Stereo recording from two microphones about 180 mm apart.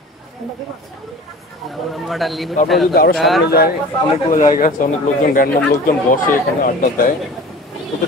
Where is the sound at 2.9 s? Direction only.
60° left (ahead or behind).